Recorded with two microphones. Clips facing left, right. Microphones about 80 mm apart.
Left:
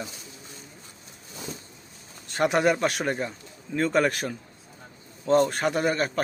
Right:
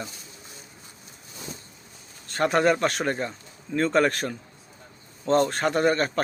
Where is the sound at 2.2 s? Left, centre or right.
Centre.